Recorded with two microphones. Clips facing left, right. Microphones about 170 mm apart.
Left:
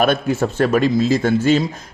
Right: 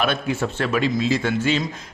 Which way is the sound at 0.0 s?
40° left (ahead or behind).